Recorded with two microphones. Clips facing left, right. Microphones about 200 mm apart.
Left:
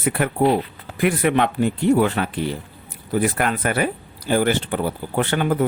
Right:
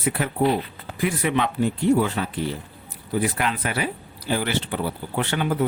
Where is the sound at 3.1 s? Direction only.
50° left (ahead or behind).